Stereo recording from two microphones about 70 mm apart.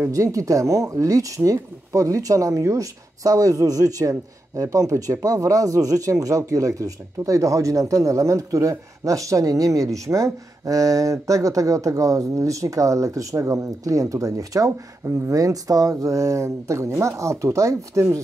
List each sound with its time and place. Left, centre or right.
0.1 s speech: right